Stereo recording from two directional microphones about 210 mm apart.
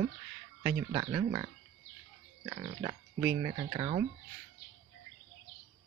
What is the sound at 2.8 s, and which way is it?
Speech, 15° right (ahead or behind).